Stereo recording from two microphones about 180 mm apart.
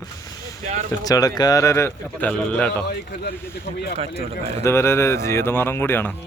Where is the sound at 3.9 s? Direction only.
35° right (ahead or behind).